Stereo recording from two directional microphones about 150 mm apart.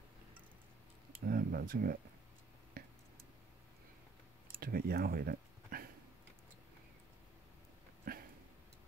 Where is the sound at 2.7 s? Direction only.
70° right (ahead or behind).